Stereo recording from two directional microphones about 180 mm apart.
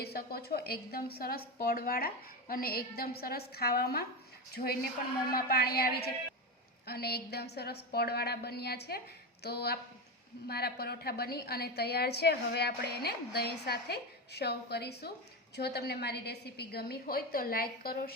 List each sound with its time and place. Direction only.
0.0 s a woman's voice: 60° left (ahead or behind)